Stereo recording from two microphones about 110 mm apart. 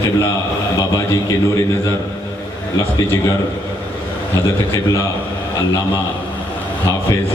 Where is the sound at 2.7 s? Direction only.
30° left (ahead or behind).